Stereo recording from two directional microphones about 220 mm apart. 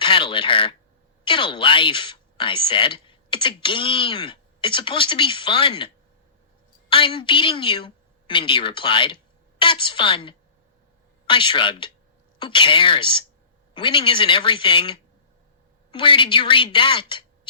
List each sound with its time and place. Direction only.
0.0 s speech: 20° left (ahead or behind)
6.9 s speech: 20° left (ahead or behind)